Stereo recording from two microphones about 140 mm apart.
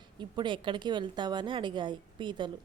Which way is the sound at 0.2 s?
35° right (ahead or behind).